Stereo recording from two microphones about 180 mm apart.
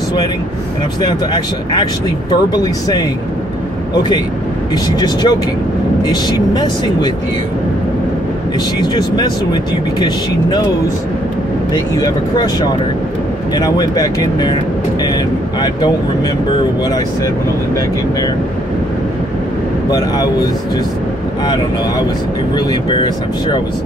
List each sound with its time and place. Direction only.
1.0 s speech: 25° left (ahead or behind)
4.8 s speech: 20° left (ahead or behind)
8.7 s speech: 25° left (ahead or behind)
11.7 s speech: 20° left (ahead or behind)
22.7 s speech: 25° left (ahead or behind)